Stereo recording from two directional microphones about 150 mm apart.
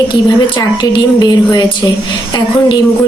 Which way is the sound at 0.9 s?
25° left (ahead or behind).